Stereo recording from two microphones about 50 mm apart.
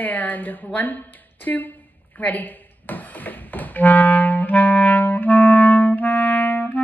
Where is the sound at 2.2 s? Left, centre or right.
Left.